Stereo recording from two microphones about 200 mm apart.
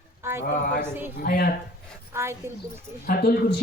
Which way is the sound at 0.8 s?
10° right (ahead or behind).